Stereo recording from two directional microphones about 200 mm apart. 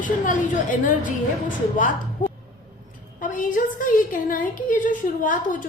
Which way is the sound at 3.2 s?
40° left (ahead or behind).